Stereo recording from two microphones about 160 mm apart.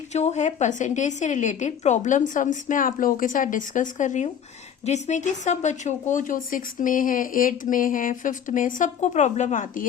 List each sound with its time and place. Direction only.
0.1 s a woman's voice: 45° left (ahead or behind)